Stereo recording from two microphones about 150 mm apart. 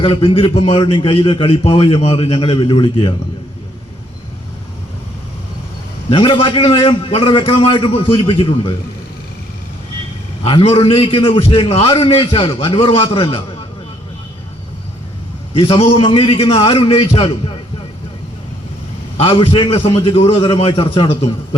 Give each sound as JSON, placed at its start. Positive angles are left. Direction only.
{"t": 0.0, "sound": "a man's voice", "side_deg": 40}
{"t": 6.1, "sound": "a man's voice", "side_deg": 35}
{"t": 10.4, "sound": "a man's voice", "side_deg": 40}
{"t": 15.8, "sound": "a man's voice", "side_deg": 40}
{"t": 19.1, "sound": "a man's voice", "side_deg": 40}